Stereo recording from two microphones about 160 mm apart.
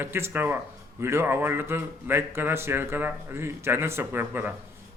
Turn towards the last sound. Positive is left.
turn(degrees=-10)  # may be behind; listen again after turning